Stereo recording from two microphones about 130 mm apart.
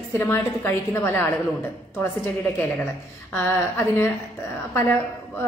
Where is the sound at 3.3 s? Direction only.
20° left (ahead or behind).